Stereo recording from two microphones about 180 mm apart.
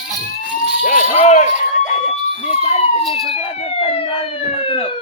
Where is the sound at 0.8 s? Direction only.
45° left (ahead or behind).